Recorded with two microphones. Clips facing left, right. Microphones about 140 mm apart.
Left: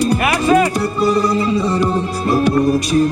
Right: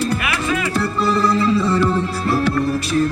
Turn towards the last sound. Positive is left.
turn(degrees=15)  # may be behind; listen again after turning